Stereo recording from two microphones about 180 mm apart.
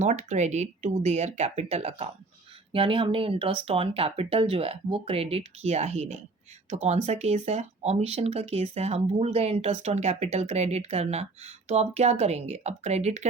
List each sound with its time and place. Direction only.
0.0 s speech: 40° right (ahead or behind)